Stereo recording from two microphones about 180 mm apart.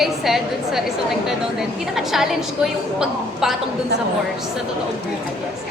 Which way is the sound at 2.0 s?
Centre (ahead or behind).